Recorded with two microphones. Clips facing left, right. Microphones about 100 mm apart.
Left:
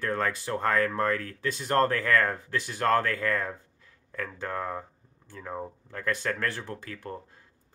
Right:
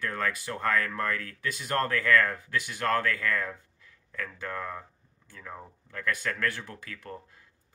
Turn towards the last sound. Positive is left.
turn(degrees=30)  # may be behind; listen again after turning